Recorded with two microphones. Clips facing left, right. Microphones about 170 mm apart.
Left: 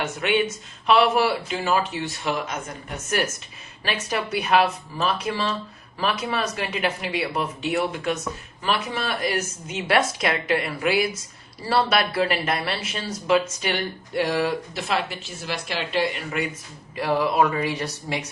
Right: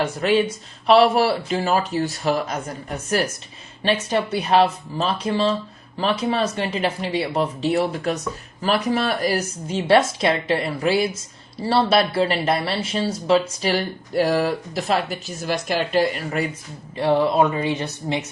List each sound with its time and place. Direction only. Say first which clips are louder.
0.0 s speech: right 4 dB; 30° right (ahead or behind)
17.0 s speech: right 3 dB; 25° right (ahead or behind)